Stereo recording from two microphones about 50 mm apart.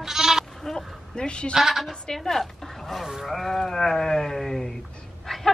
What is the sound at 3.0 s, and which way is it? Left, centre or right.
Speech, centre.